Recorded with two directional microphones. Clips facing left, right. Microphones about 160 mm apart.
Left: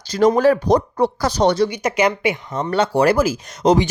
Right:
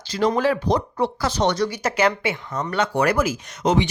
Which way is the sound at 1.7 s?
15° left (ahead or behind).